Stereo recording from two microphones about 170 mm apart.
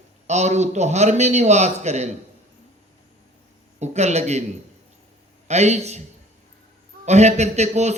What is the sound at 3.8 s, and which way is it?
Speech, 40° right (ahead or behind).